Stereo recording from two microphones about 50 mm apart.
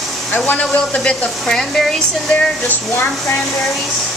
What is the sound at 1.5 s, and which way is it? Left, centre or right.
Speech, centre.